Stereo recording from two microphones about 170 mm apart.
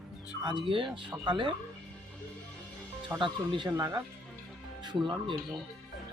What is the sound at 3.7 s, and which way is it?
Speech, 15° right (ahead or behind).